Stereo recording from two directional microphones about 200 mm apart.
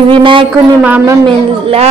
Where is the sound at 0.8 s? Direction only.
10° right (ahead or behind).